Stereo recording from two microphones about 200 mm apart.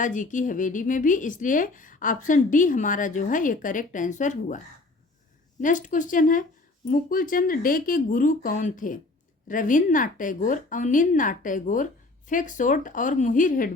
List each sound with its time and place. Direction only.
0.0 s a woman's voice: 40° left (ahead or behind)